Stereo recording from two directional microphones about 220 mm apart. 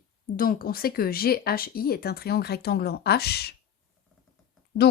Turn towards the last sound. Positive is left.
turn(degrees=45)  # may be behind; listen again after turning